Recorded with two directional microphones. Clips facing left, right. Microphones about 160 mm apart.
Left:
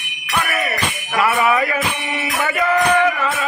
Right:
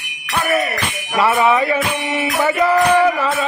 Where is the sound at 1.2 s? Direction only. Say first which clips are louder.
Right 2 dB; 25° right (ahead or behind).